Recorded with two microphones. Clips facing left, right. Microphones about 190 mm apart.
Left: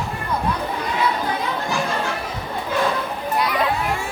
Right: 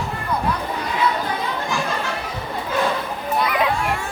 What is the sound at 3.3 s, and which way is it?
Children playing, centre (ahead or behind).